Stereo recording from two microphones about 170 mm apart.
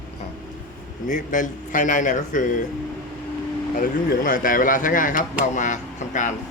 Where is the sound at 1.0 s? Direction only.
50° left (ahead or behind).